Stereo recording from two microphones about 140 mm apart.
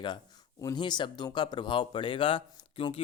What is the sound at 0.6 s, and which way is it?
Speech, 30° left (ahead or behind).